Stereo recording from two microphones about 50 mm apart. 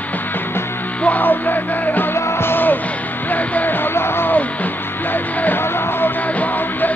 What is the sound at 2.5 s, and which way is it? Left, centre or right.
Music, left.